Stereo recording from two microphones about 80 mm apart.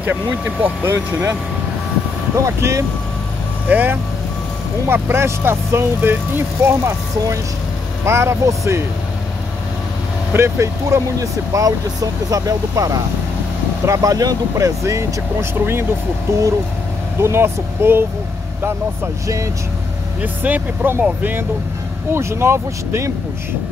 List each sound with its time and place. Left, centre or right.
0.0 s speech: right
2.3 s speech: right
3.6 s speech: right
10.3 s speech: right
16.3 s speech: right
20.2 s speech: centre; by 23.1 s right